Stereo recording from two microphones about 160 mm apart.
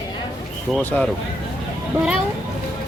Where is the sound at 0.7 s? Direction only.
5° left (ahead or behind).